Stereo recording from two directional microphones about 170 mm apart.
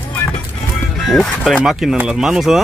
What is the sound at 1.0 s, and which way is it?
Speech, centre (ahead or behind).